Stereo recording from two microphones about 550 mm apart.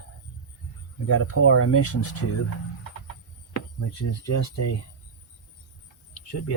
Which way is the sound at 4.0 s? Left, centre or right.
Left.